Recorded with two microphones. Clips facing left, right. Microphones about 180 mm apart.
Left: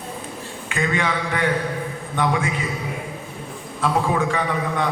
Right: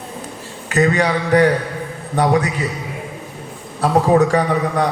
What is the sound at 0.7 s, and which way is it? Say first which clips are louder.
A man's voice: right 7 dB; 40° right (ahead or behind).